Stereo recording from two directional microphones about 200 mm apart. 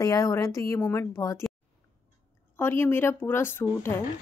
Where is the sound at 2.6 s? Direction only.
10° left (ahead or behind).